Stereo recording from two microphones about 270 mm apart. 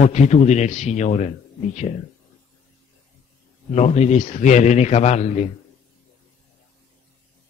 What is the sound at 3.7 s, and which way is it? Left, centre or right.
A man's voice, left.